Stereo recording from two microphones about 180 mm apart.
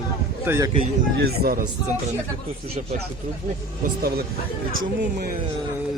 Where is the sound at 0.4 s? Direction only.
15° right (ahead or behind).